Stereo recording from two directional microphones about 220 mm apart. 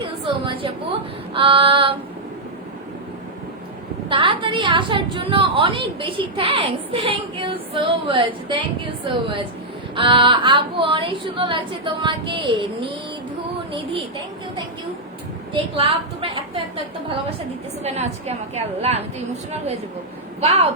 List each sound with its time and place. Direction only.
0.3 s a woman's voice: 25° right (ahead or behind)
4.1 s a woman's voice: 25° right (ahead or behind)
15.5 s a woman's voice: 25° right (ahead or behind)
17.8 s a woman's voice: 30° right (ahead or behind)